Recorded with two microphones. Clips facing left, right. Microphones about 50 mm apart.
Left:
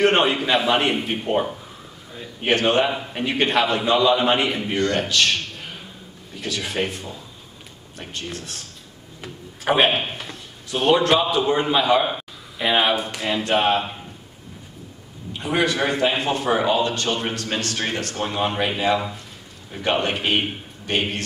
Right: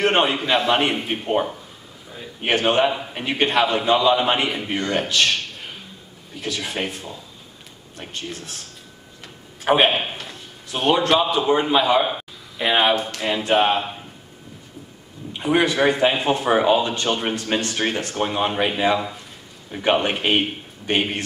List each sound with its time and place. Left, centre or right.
0.0 s a man's voice: centre
9.7 s a man's voice: centre
15.3 s speech: centre
19.7 s a man's voice: centre
20.9 s speech: centre